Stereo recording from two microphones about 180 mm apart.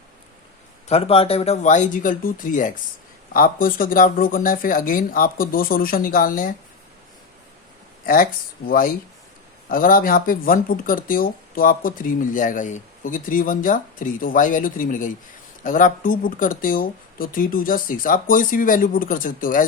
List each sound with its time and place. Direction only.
0.9 s speech: 35° left (ahead or behind); by 6.5 s 50° left (ahead or behind)
8.0 s speech: 50° left (ahead or behind)